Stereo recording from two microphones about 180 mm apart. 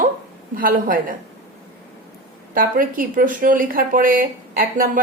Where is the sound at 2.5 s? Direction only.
50° right (ahead or behind).